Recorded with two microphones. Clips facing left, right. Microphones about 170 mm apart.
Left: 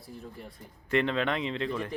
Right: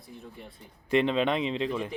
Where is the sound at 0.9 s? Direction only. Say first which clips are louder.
Right 3 dB; 20° right (ahead or behind).